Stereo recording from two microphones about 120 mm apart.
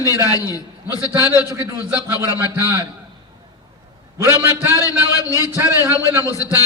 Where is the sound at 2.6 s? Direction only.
25° right (ahead or behind).